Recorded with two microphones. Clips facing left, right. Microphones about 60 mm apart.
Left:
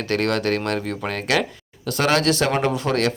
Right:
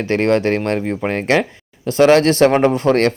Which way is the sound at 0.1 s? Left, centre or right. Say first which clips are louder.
Right 6 dB; right.